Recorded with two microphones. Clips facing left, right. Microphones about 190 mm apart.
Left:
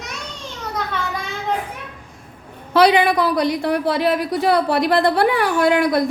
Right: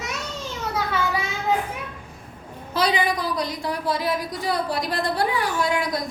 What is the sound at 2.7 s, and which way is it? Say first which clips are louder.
A woman's voice: left 8 dB; 65° left (ahead or behind).